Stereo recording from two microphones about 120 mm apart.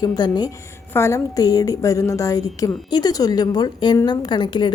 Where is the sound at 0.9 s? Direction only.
25° left (ahead or behind).